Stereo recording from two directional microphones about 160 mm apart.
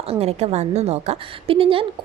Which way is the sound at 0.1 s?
40° right (ahead or behind).